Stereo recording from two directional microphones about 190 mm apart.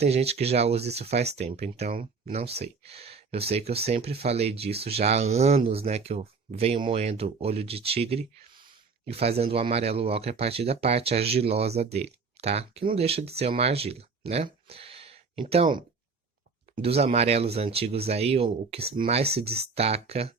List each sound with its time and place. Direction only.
0.0 s speech: 35° right (ahead or behind)
14.7 s a sound: 30° right (ahead or behind)
16.7 s speech: 30° right (ahead or behind)